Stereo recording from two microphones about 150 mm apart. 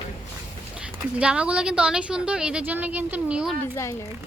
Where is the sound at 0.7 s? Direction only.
5° right (ahead or behind).